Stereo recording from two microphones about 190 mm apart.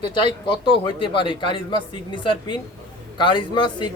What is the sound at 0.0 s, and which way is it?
Speech, 25° left (ahead or behind).